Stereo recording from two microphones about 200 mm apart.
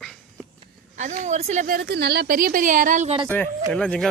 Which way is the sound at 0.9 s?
40° right (ahead or behind).